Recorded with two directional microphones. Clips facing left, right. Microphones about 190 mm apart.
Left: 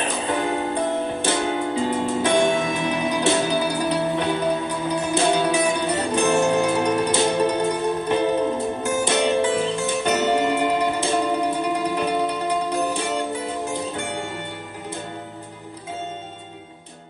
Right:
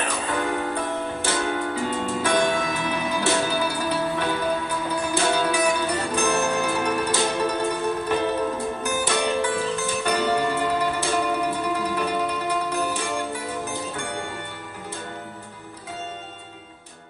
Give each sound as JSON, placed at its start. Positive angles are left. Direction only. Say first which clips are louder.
{"t": 0.0, "sound": "music", "louder": "left 2 dB", "side_deg": 20}